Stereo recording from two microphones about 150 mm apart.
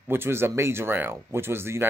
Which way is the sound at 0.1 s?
15° right (ahead or behind).